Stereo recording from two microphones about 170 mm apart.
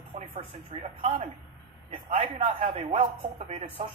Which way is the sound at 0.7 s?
40° right (ahead or behind).